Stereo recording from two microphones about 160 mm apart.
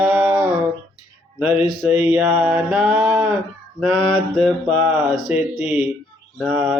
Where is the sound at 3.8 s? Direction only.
Centre (ahead or behind).